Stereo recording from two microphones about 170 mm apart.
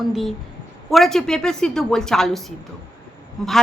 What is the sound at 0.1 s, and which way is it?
A woman's voice, centre (ahead or behind).